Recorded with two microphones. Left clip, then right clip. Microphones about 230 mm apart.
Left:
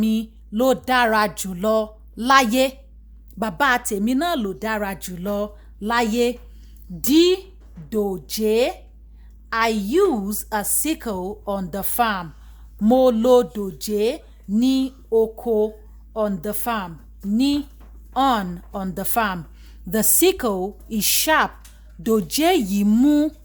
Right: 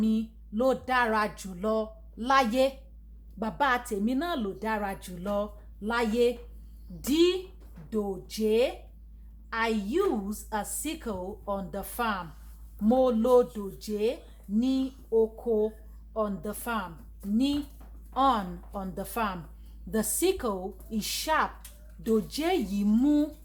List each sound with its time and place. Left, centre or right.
0.0 s a woman's voice: left